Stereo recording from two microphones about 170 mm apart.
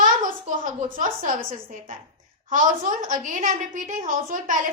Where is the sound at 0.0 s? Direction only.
50° right (ahead or behind).